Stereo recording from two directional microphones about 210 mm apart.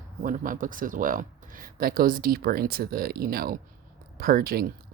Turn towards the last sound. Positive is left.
turn(degrees=-45)  # may be behind; listen again after turning